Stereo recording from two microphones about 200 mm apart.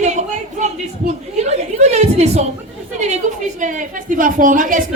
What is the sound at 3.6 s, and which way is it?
A woman's voice, 40° right (ahead or behind).